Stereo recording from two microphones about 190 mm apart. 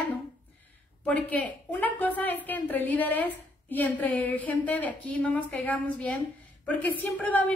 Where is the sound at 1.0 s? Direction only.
10° left (ahead or behind).